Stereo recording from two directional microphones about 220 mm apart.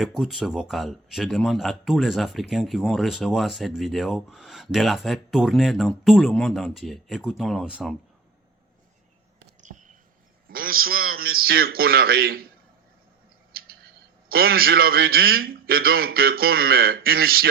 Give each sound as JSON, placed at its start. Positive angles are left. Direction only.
{"t": 0.0, "sound": "speech", "side_deg": 0}
{"t": 9.6, "sound": "a sound", "side_deg": -35}
{"t": 10.5, "sound": "a man's voice", "side_deg": -40}
{"t": 13.5, "sound": "a man's voice", "side_deg": -45}